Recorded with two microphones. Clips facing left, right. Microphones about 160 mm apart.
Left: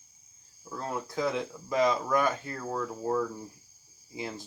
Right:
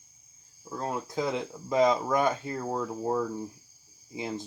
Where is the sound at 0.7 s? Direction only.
20° right (ahead or behind).